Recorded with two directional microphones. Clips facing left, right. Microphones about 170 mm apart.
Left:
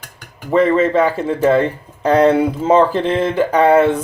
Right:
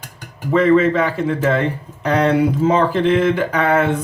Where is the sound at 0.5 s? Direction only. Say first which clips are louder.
Even; 35° left (ahead or behind).